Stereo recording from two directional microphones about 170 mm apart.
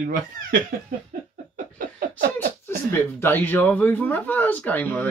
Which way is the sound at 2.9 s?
10° left (ahead or behind).